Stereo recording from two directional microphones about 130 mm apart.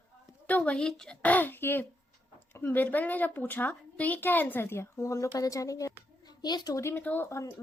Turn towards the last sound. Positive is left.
turn(degrees=20)  # may be behind; listen again after turning